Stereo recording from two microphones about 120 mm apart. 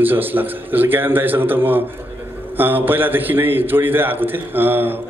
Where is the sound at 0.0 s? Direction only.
15° right (ahead or behind).